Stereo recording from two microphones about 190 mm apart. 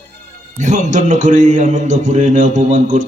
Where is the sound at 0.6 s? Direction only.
40° right (ahead or behind).